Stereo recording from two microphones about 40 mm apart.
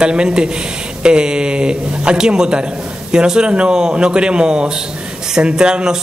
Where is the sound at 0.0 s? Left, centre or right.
Right.